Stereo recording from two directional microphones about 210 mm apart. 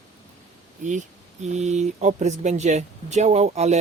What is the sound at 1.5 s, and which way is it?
Speech, 35° right (ahead or behind).